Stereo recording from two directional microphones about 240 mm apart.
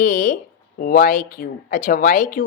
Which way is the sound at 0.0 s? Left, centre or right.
Left.